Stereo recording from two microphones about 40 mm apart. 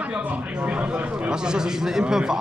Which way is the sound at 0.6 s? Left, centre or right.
Right.